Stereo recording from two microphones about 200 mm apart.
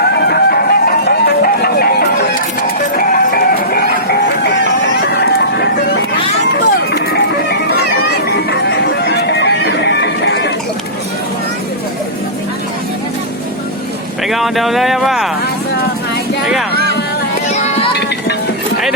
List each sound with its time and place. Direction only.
0.0 s music: 55° left (ahead or behind)
14.3 s a sound: centre (ahead or behind)
17.5 s music: 35° left (ahead or behind)